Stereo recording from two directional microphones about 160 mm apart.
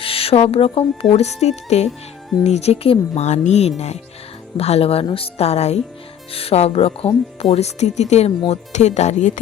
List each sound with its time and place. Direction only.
0.0 s music: 35° left (ahead or behind)
1.1 s speech: 40° left (ahead or behind)